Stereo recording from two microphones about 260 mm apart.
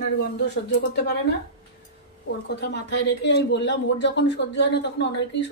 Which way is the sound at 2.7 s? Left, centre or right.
Left.